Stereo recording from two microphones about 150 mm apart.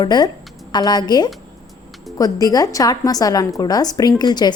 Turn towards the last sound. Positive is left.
turn(degrees=30)  # may be behind; listen again after turning